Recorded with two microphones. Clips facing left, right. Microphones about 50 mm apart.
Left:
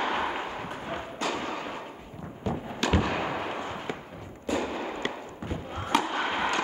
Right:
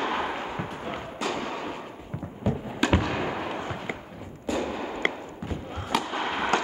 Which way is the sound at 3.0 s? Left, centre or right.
Centre.